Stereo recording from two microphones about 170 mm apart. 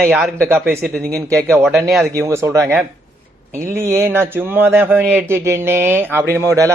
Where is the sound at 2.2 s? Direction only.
15° right (ahead or behind).